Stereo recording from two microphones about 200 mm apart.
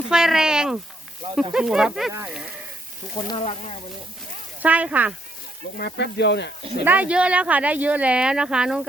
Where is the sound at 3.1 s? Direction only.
30° left (ahead or behind).